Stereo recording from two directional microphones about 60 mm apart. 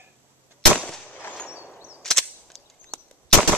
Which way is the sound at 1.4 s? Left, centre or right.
Centre.